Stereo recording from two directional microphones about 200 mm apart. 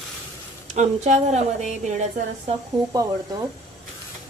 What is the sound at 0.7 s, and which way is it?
Speech, 35° right (ahead or behind).